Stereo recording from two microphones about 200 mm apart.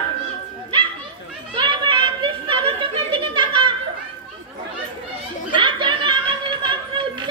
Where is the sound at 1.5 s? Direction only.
25° right (ahead or behind).